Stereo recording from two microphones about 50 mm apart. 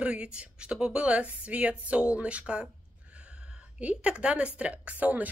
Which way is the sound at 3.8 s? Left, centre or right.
Right.